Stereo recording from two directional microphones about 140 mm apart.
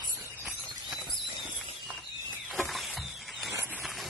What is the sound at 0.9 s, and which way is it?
Horse, 5° right (ahead or behind).